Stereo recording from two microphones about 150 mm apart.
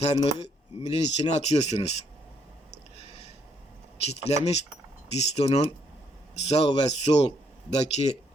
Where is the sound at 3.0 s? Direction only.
40° left (ahead or behind).